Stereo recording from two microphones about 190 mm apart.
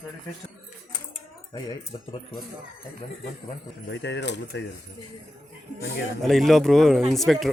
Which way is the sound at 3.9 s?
65° left (ahead or behind).